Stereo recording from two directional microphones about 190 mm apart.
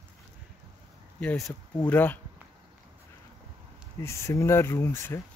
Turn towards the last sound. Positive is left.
turn(degrees=10)  # may be behind; listen again after turning